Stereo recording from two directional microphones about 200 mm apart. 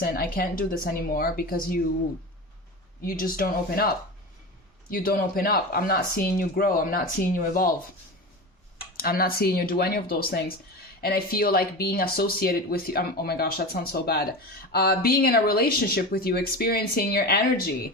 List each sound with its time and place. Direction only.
0.0 s speech: 45° left (ahead or behind)
3.0 s speech: 45° left (ahead or behind)
4.9 s speech: 45° left (ahead or behind)
9.0 s speech: 50° left (ahead or behind)